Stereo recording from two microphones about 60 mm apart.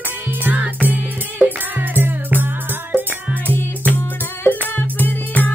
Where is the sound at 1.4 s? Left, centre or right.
Right.